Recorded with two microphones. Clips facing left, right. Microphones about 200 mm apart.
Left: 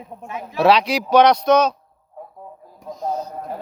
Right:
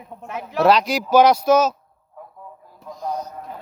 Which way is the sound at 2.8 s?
25° left (ahead or behind).